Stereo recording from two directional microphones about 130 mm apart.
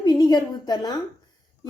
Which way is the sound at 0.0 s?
35° left (ahead or behind).